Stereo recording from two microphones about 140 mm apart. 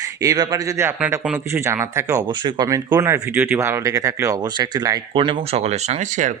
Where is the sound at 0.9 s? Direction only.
10° right (ahead or behind).